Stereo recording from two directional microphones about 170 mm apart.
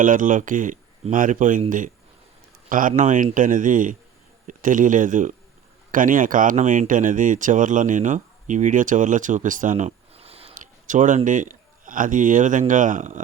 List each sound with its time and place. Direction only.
0.0 s speech: 50° right (ahead or behind)
2.6 s speech: 50° right (ahead or behind); by 10.5 s 35° right (ahead or behind)
10.5 s speech: 50° right (ahead or behind)